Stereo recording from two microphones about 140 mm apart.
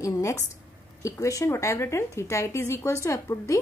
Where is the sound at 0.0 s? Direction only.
25° left (ahead or behind).